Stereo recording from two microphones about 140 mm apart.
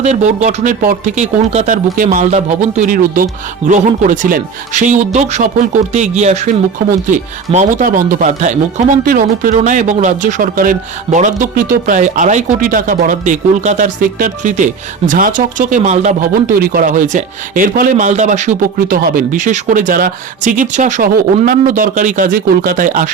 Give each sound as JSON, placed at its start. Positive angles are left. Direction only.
{"t": 0.0, "sound": "speech", "side_deg": -55}
{"t": 3.7, "sound": "speech", "side_deg": -65}
{"t": 9.6, "sound": "speech", "side_deg": -60}